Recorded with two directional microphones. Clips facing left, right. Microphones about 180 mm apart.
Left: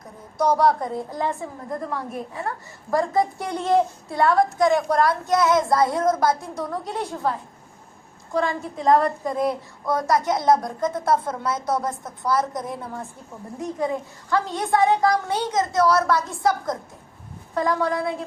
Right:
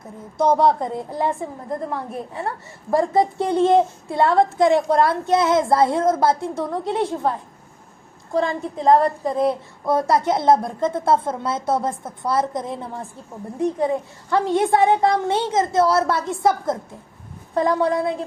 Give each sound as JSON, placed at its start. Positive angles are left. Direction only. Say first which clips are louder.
{"t": 0.3, "sound": "a woman's voice", "louder": "right 2 dB", "side_deg": -25}